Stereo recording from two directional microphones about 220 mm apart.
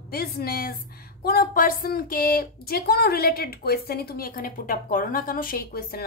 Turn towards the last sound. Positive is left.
turn(degrees=45)  # may be behind; listen again after turning